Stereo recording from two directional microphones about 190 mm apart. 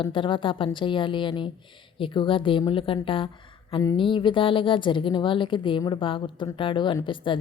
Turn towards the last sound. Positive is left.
turn(degrees=25)  # may be behind; listen again after turning